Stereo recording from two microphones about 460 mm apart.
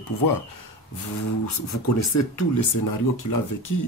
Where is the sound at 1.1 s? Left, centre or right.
Left.